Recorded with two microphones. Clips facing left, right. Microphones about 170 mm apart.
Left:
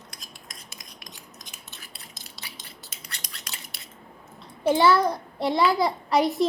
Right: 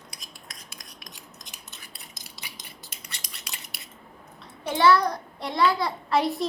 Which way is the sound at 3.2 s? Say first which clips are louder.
Left 1 dB; centre (ahead or behind).